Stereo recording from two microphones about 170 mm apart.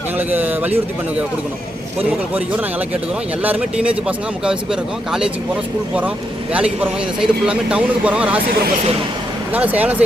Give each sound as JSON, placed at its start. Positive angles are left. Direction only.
{"t": 0.2, "sound": "speech", "side_deg": -10}
{"t": 2.0, "sound": "speech", "side_deg": -10}
{"t": 6.5, "sound": "speech", "side_deg": -5}
{"t": 8.4, "sound": "speech", "side_deg": -60}
{"t": 9.5, "sound": "speech", "side_deg": -10}